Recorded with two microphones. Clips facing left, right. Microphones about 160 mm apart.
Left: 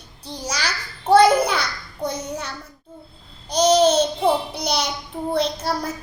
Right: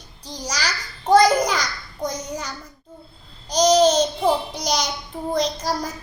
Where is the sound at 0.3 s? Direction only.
5° left (ahead or behind).